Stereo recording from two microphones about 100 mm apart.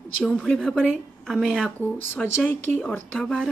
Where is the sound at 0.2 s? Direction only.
5° left (ahead or behind).